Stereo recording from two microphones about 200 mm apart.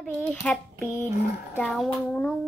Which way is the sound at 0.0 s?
5° left (ahead or behind).